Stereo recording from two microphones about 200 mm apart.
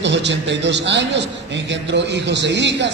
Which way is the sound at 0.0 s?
60° right (ahead or behind).